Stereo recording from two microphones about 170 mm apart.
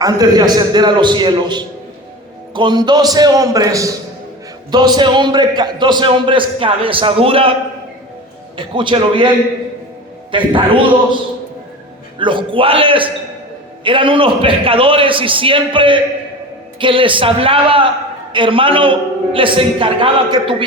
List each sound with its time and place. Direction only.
0.0 s a man's voice: 25° right (ahead or behind)
8.5 s a man's voice: 30° right (ahead or behind)
10.3 s a man's voice: 30° right (ahead or behind)
12.2 s a man's voice: 30° right (ahead or behind)